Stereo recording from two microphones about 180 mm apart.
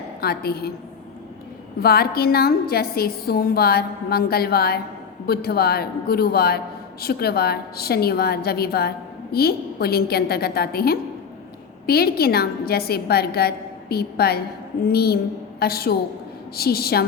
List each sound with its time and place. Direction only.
0.2 s a woman's voice: 60° left (ahead or behind)
1.8 s a woman's voice: 60° left (ahead or behind)